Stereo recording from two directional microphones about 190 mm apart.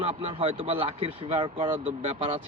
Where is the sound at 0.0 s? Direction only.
30° right (ahead or behind).